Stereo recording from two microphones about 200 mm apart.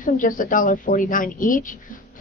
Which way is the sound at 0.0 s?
45° left (ahead or behind).